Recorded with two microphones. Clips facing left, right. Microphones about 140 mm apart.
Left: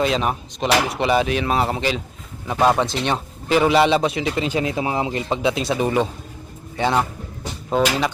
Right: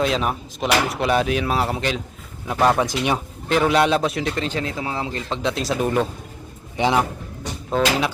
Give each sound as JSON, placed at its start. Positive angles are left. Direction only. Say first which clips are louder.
{"t": 0.0, "sound": "a man's voice", "louder": "left 1 dB", "side_deg": 0}
{"t": 2.8, "sound": "speech", "louder": "even", "side_deg": -10}
{"t": 3.5, "sound": "a man's voice", "louder": "left 2 dB", "side_deg": 0}
{"t": 6.7, "sound": "a man's voice", "louder": "right 1 dB", "side_deg": -15}
{"t": 7.7, "sound": "a man's voice", "louder": "left 1 dB", "side_deg": 0}